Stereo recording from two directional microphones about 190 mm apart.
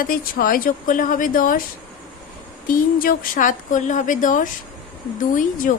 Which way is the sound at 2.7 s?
50° left (ahead or behind).